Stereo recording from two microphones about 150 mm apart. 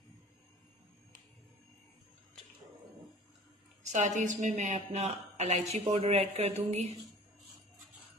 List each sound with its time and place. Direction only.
3.9 s speech: 55° right (ahead or behind)